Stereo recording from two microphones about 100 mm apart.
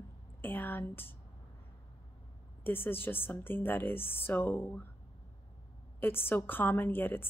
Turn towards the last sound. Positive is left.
turn(degrees=20)  # may be behind; listen again after turning